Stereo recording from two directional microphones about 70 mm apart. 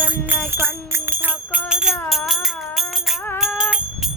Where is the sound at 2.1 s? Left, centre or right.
Centre.